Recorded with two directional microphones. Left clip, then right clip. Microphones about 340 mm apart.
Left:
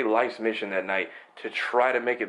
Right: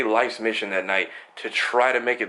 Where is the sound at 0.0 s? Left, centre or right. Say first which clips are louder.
Right 3 dB; centre.